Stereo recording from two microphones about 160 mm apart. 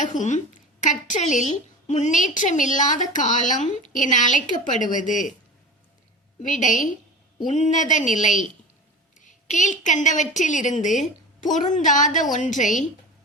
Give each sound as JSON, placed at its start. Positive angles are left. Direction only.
{"t": 0.0, "sound": "a woman's voice", "side_deg": 50}
{"t": 6.4, "sound": "a woman's voice", "side_deg": 50}